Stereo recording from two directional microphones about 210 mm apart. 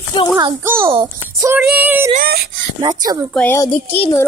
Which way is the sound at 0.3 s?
15° right (ahead or behind).